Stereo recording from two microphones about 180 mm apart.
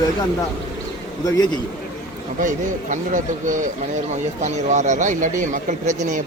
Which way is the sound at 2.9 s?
45° right (ahead or behind).